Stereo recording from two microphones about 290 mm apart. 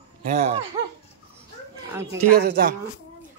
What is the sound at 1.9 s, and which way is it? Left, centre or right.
Speech, centre.